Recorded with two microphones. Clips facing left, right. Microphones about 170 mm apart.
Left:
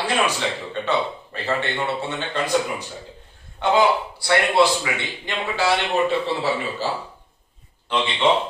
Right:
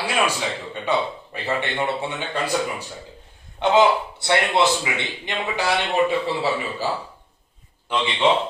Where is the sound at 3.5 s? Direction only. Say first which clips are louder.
Right 1 dB; 20° right (ahead or behind).